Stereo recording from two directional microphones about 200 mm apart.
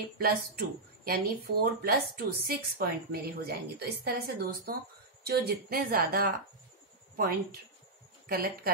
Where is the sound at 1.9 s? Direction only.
50° right (ahead or behind).